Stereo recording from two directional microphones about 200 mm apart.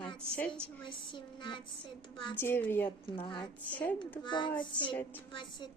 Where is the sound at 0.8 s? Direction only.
25° left (ahead or behind).